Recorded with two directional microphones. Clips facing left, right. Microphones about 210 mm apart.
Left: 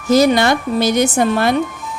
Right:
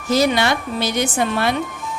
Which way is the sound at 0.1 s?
45° left (ahead or behind).